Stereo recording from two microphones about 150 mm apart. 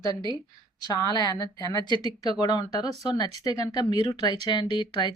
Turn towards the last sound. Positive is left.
turn(degrees=30)  # may be behind; listen again after turning